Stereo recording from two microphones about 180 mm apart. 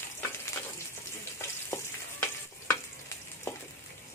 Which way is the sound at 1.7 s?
15° left (ahead or behind).